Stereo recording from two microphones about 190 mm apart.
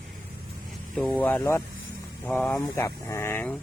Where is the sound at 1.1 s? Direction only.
10° left (ahead or behind).